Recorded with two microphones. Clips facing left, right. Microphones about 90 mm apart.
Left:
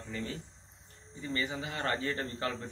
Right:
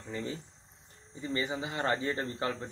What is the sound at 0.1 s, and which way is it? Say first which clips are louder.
Speech: right 2 dB; 20° right (ahead or behind).